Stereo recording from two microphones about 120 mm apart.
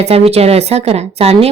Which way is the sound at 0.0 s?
60° right (ahead or behind).